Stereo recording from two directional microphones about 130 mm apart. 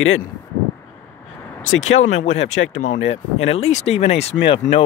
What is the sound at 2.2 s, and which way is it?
Speech, 60° left (ahead or behind).